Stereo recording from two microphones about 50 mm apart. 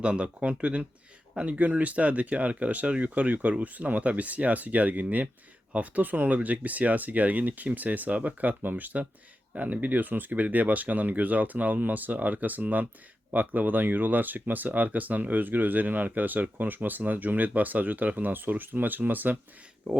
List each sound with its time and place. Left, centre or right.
0.0 s speech: right